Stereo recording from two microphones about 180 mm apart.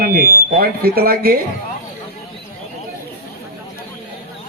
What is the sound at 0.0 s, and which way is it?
Speech, 55° right (ahead or behind).